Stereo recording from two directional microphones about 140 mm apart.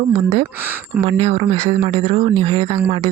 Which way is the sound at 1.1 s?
45° right (ahead or behind).